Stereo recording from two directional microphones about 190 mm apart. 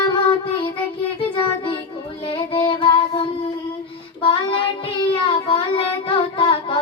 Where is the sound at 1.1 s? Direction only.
30° left (ahead or behind).